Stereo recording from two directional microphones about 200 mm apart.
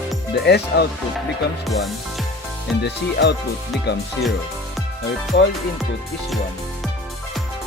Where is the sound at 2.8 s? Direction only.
55° left (ahead or behind).